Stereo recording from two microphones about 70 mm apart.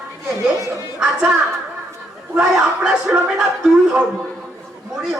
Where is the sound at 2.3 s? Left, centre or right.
Centre.